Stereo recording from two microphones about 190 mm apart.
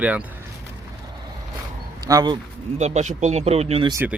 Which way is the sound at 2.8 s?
35° right (ahead or behind).